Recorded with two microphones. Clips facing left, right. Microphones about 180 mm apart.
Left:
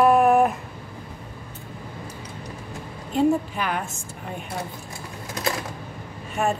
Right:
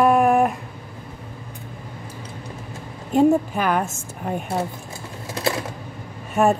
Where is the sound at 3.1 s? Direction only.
45° right (ahead or behind).